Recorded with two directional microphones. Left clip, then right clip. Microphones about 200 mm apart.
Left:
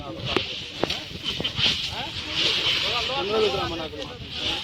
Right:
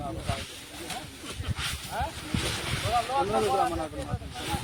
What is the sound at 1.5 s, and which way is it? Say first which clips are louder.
Vehicle: left 7 dB; 45° right (ahead or behind).